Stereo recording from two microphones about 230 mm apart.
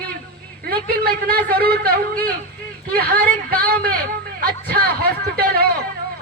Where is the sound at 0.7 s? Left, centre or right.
Right.